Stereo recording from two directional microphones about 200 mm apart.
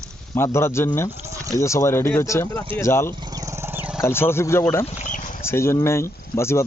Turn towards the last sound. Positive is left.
turn(degrees=15)  # may be behind; listen again after turning